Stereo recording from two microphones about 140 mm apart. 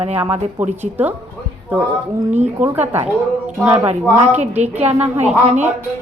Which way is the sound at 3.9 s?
60° right (ahead or behind).